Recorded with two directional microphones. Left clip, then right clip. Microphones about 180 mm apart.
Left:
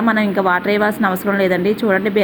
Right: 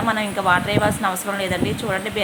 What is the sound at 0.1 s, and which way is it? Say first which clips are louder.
A woman's voice: left 2 dB; 25° left (ahead or behind).